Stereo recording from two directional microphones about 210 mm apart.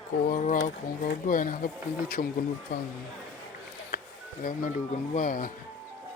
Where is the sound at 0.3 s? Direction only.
40° left (ahead or behind).